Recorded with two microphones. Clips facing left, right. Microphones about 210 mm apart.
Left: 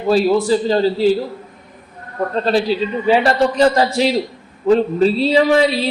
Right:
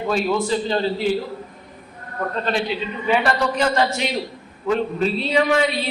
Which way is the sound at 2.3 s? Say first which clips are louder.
Left 7 dB; 35° left (ahead or behind).